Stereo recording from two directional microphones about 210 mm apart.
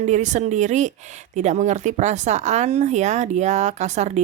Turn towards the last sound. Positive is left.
turn(degrees=-35)  # may be behind; listen again after turning